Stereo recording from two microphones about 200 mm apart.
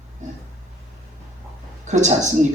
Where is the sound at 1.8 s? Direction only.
35° right (ahead or behind).